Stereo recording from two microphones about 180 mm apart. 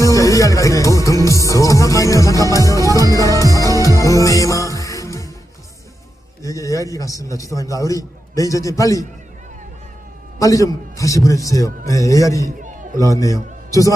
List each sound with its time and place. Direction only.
0.0 s music: 20° left (ahead or behind)
3.4 s music: 20° right (ahead or behind)
3.8 s music: 20° left (ahead or behind)
6.4 s a man's voice: 20° left (ahead or behind)
10.3 s a man's voice: 20° left (ahead or behind)